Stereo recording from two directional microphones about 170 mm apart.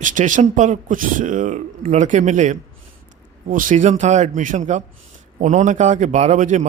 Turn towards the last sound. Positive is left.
turn(degrees=-45)  # may be behind; listen again after turning